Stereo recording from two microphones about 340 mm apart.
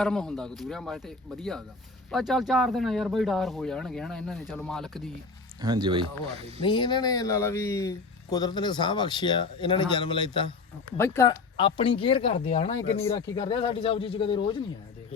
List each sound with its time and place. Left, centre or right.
0.0 s speech: centre
5.6 s speech: centre
6.6 s speech: centre